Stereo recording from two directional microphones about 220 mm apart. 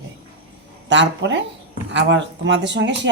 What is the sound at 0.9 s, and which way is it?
Speech, 55° right (ahead or behind).